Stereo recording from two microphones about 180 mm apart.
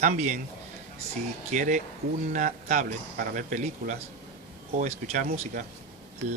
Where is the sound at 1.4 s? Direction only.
45° right (ahead or behind).